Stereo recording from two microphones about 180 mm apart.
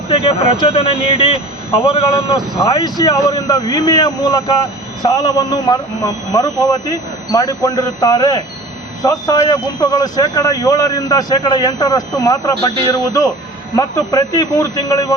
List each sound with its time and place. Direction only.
0.1 s a man's voice: 30° left (ahead or behind)
13.7 s a man's voice: 20° left (ahead or behind)